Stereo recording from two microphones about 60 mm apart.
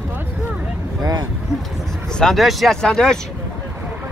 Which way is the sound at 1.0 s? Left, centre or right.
Right.